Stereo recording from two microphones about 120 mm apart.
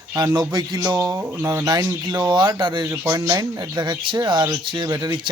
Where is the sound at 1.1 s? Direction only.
20° right (ahead or behind); by 2.9 s 40° right (ahead or behind).